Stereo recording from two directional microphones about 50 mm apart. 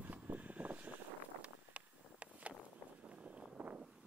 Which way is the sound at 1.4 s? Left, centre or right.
Right.